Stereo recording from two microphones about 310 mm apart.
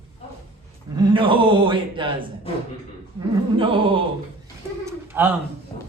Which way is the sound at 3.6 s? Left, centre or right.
Centre.